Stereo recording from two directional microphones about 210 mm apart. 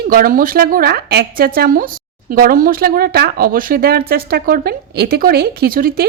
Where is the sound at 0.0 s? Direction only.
45° right (ahead or behind).